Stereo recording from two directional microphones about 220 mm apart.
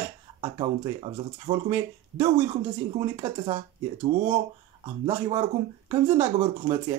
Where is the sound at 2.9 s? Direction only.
15° right (ahead or behind).